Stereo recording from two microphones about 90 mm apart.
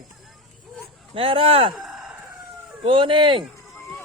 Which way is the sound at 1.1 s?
85° right.